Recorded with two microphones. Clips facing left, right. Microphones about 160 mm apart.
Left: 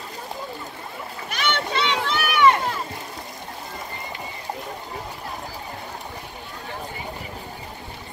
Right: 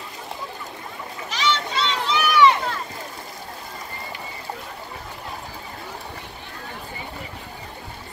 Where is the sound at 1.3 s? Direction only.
60° left (ahead or behind).